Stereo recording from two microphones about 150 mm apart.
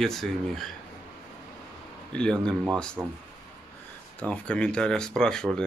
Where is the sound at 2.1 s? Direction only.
5° left (ahead or behind).